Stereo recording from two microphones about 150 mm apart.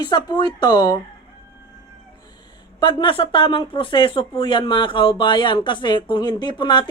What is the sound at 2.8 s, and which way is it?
Speech, 35° left (ahead or behind).